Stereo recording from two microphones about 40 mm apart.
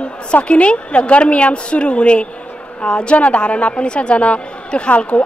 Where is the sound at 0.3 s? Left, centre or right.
Left.